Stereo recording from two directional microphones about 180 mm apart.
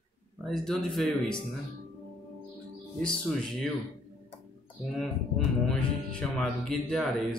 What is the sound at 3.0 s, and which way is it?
Music, 5° left (ahead or behind).